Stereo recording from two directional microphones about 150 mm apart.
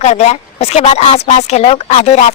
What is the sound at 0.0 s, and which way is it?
Speech, 50° left (ahead or behind).